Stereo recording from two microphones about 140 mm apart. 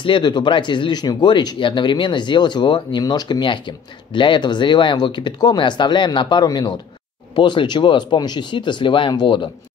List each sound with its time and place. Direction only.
0.0 s speech: 35° left (ahead or behind)